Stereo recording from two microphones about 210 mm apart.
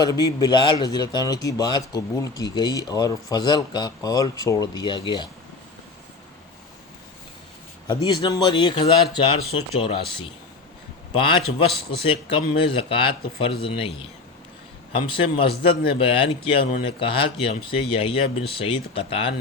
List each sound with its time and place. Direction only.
0.0 s a man's voice: 20° left (ahead or behind)
8.0 s a man's voice: 20° left (ahead or behind)
11.1 s a man's voice: 25° left (ahead or behind)
14.9 s a man's voice: 25° left (ahead or behind)